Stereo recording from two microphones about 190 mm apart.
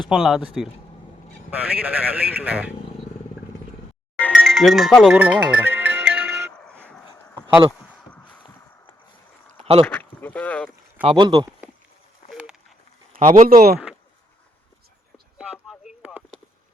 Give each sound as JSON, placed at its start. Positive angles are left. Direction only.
{"t": 0.0, "sound": "a man's voice", "side_deg": 0}
{"t": 4.2, "sound": "speech", "side_deg": 5}
{"t": 5.1, "sound": "music", "side_deg": -10}
{"t": 6.5, "sound": "a sound", "side_deg": 5}
{"t": 9.8, "sound": "speech", "side_deg": 10}
{"t": 11.0, "sound": "speech", "side_deg": -25}
{"t": 12.3, "sound": "a sound", "side_deg": -5}
{"t": 13.1, "sound": "speech", "side_deg": -45}
{"t": 15.6, "sound": "radio", "side_deg": 0}